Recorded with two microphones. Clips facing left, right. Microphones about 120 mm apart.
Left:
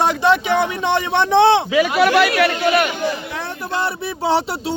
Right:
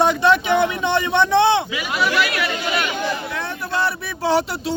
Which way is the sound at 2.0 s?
65° left (ahead or behind).